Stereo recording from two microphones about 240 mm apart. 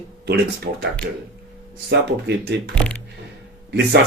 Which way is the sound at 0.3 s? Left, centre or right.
Right.